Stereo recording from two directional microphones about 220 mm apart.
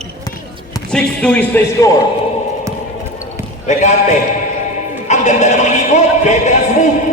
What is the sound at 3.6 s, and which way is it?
Speech, 35° left (ahead or behind).